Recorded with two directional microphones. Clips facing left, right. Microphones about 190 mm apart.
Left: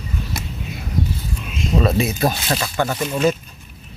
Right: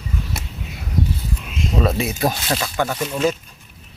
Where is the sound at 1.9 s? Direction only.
10° right (ahead or behind).